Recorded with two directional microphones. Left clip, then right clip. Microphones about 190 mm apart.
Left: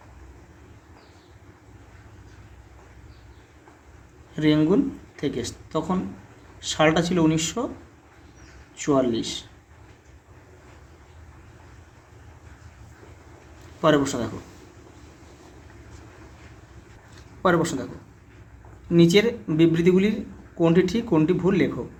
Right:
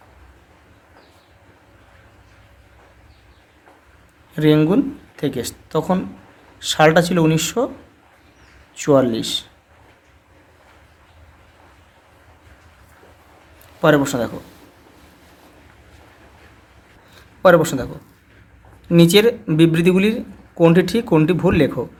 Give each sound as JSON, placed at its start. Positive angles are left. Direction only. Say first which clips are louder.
{"t": 4.4, "sound": "speech", "louder": "right 5 dB", "side_deg": -40}
{"t": 8.7, "sound": "speech", "louder": "right 7 dB", "side_deg": -45}
{"t": 13.8, "sound": "speech", "louder": "right 5 dB", "side_deg": -35}
{"t": 17.4, "sound": "speech", "louder": "right 9 dB", "side_deg": -35}
{"t": 18.9, "sound": "speech", "louder": "right 6 dB", "side_deg": -40}